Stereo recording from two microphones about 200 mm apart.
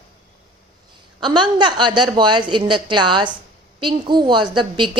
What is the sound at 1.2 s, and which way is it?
A woman's voice, 20° right (ahead or behind).